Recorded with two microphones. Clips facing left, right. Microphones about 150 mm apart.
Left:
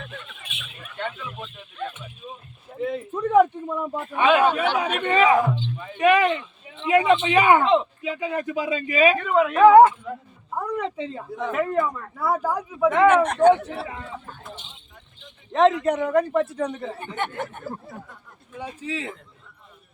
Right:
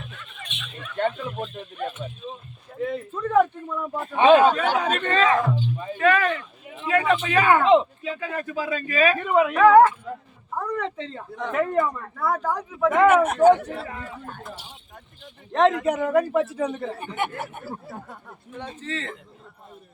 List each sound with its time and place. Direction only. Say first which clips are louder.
0.4 s a sound: right 3 dB; 5° left (ahead or behind)
0.9 s speech: right 7 dB; 45° right (ahead or behind)
2.7 s a man's voice: left 1 dB; centre (ahead or behind)
3.1 s speech: left 3 dB; 15° left (ahead or behind)
4.1 s a man's voice: right 4 dB; 30° right (ahead or behind)
4.8 s a man's voice: left 2 dB; 10° left (ahead or behind)
9.1 s speech: even; 10° right (ahead or behind)
9.6 s speech: left 3 dB; 20° left (ahead or behind)
13.1 s a man's voice: right 1 dB; 5° right (ahead or behind)
15.8 s a man's voice: even; 5° right (ahead or behind)
17.9 s speech: right 3 dB; 50° right (ahead or behind)
18.8 s speech: left 2 dB; 10° left (ahead or behind)